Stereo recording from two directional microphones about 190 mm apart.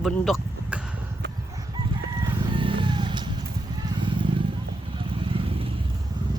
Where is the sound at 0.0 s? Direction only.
Centre (ahead or behind).